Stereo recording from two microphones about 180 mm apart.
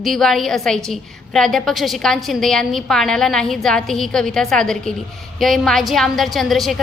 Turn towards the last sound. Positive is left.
turn(degrees=0)  # may be behind; listen again after turning